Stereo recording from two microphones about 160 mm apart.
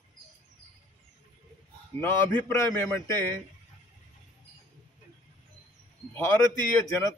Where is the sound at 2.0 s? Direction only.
15° left (ahead or behind).